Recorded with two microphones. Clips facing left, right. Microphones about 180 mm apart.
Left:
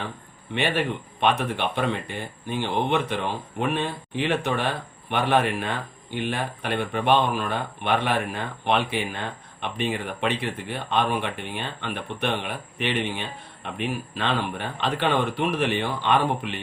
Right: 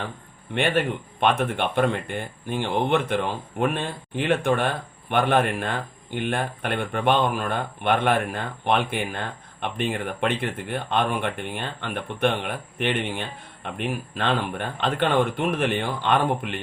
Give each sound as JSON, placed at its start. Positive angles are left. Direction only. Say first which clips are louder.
{"t": 1.2, "sound": "speech", "louder": "right 1 dB", "side_deg": -50}